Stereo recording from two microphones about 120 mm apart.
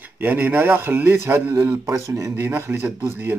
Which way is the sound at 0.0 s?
15° right (ahead or behind).